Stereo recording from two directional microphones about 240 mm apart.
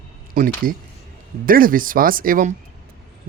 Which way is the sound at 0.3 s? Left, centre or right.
Right.